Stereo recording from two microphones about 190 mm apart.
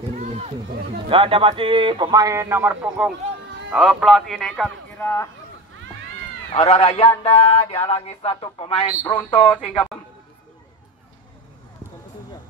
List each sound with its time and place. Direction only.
0.1 s speech: 35° right (ahead or behind); by 5.3 s 10° left (ahead or behind)
6.5 s speech: 35° left (ahead or behind)